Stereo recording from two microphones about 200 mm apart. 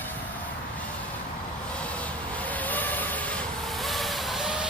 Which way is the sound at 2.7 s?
10° left (ahead or behind).